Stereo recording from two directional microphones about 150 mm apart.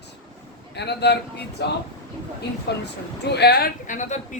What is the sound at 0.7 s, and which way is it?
Speech, 90° left.